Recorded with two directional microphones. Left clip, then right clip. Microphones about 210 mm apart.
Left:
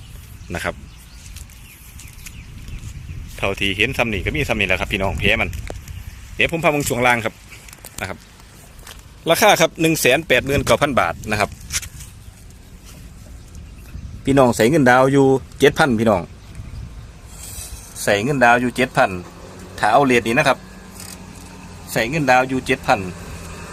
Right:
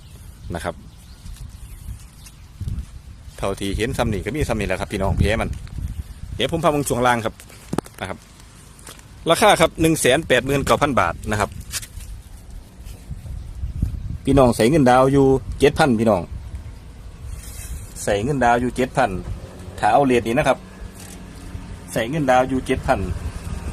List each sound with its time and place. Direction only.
0.5 s a man's voice: 5° left (ahead or behind)
3.3 s speech: centre (ahead or behind)
3.6 s speech: 45° right (ahead or behind)
3.8 s speech: centre (ahead or behind)
9.2 s speech: 10° right (ahead or behind)
14.3 s speech: 15° right (ahead or behind)
18.0 s a man's voice: 5° left (ahead or behind)
21.9 s a man's voice: 15° left (ahead or behind)